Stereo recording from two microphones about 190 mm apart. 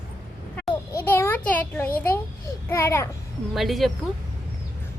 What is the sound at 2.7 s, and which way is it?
Speech, 15° left (ahead or behind).